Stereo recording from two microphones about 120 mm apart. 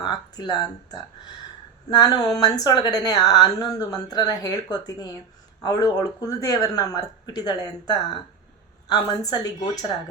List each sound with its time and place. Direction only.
0.0 s speech: 35° left (ahead or behind)